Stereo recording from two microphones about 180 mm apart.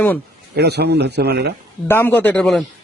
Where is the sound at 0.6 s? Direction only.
65° right (ahead or behind).